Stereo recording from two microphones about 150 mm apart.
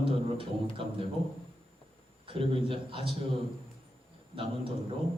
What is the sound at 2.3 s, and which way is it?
Speech, 35° right (ahead or behind).